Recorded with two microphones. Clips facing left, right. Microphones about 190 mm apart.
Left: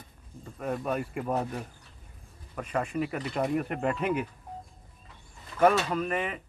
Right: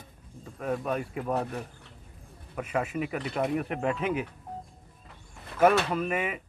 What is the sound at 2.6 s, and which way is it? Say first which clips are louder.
Speech: even; 5° right (ahead or behind).